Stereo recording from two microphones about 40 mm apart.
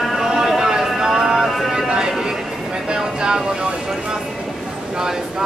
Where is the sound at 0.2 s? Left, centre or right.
Centre.